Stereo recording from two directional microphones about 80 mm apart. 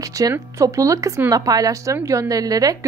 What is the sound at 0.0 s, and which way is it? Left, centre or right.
A woman's voice, right.